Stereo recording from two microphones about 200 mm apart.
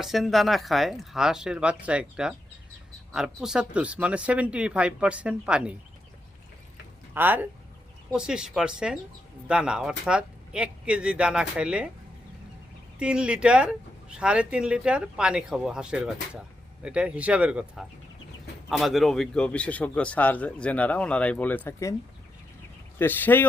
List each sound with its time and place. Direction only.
0.0 s a man's voice: centre (ahead or behind)
7.1 s a man's voice: 10° right (ahead or behind)
13.0 s a man's voice: 5° right (ahead or behind); by 21.9 s 15° left (ahead or behind)
23.0 s speech: 10° left (ahead or behind)